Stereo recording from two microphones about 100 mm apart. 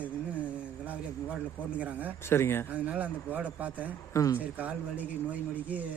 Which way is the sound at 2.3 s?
25° left (ahead or behind).